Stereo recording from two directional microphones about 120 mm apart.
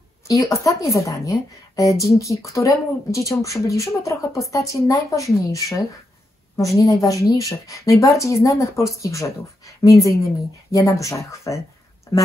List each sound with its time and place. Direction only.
0.3 s a woman's voice: 25° left (ahead or behind)